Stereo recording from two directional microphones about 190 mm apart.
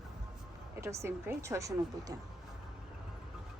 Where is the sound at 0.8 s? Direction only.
15° right (ahead or behind).